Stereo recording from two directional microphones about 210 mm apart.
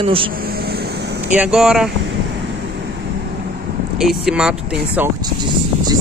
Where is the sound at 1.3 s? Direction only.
5° right (ahead or behind).